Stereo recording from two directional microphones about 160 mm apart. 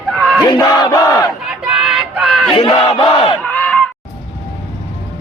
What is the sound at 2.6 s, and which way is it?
Battle cry, 35° left (ahead or behind).